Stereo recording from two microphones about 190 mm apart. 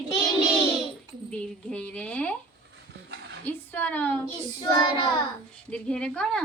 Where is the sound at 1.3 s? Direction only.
5° left (ahead or behind).